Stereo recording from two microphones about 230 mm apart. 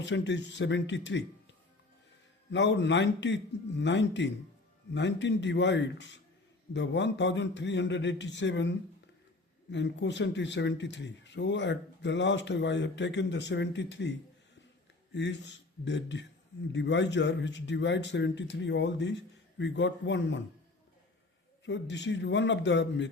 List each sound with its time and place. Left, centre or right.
0.0 s speech: left
2.5 s speech: left
21.6 s speech: left